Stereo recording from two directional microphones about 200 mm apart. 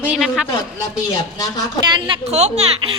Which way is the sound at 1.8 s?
25° right (ahead or behind).